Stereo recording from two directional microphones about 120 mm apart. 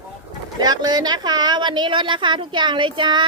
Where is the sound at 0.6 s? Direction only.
35° right (ahead or behind).